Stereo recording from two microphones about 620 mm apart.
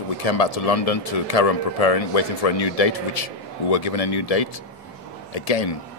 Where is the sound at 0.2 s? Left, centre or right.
Left.